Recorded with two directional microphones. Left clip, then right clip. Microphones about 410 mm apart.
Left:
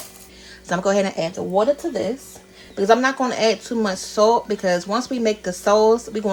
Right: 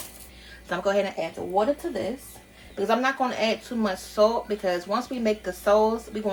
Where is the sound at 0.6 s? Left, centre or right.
Centre.